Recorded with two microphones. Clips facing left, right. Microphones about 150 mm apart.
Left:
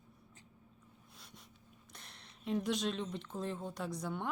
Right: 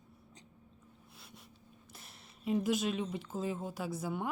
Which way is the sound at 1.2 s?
5° right (ahead or behind).